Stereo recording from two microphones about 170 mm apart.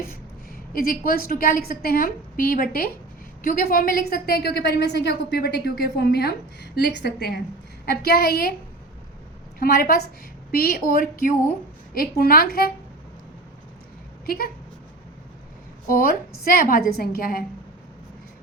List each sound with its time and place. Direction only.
0.0 s a woman's voice: 60° left (ahead or behind)
9.6 s a woman's voice: 60° left (ahead or behind)
14.3 s a woman's voice: 60° left (ahead or behind)
15.9 s a woman's voice: 60° left (ahead or behind)